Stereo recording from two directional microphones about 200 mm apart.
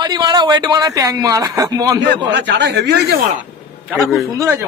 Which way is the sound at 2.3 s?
60° right (ahead or behind).